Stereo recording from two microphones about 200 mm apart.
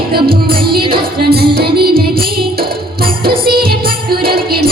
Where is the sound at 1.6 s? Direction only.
50° right (ahead or behind).